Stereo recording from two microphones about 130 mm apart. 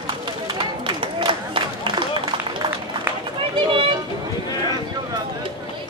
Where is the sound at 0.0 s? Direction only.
35° right (ahead or behind).